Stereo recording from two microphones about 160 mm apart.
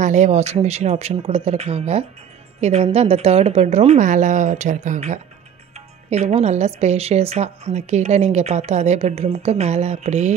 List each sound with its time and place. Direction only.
0.0 s a woman's voice: 50° right (ahead or behind)